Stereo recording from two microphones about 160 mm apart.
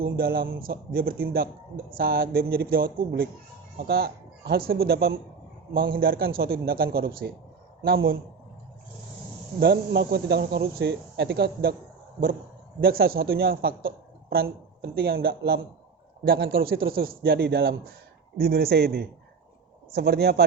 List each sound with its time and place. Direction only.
0.0 s speech: 65° right (ahead or behind)
3.8 s speech: 80° right
9.6 s speech: 90° right
12.8 s speech: 70° right (ahead or behind); by 19.0 s 90° right
19.9 s a man's voice: 80° right